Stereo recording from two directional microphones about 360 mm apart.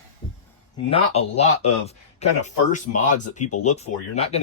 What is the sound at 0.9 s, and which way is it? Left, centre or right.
Speech, centre.